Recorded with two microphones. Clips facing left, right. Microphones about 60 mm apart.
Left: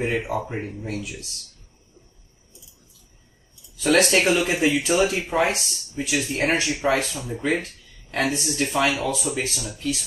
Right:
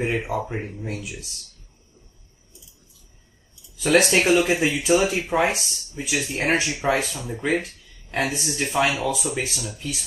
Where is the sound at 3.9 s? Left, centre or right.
Centre.